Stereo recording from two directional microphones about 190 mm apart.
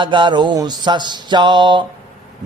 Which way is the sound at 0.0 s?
25° right (ahead or behind).